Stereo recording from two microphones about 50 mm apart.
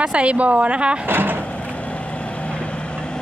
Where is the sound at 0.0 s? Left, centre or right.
Right.